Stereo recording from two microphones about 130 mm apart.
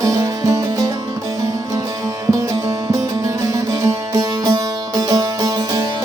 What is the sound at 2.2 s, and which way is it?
Music, 25° right (ahead or behind).